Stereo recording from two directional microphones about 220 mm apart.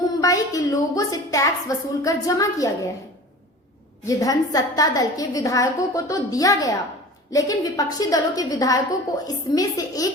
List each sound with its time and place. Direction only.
0.2 s a woman's voice: 15° left (ahead or behind)
4.0 s a woman's voice: 15° left (ahead or behind)